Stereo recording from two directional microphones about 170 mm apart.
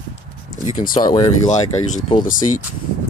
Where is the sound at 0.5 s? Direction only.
50° left (ahead or behind).